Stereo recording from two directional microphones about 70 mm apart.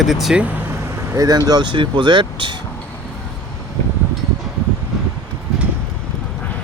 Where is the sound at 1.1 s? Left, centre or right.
Right.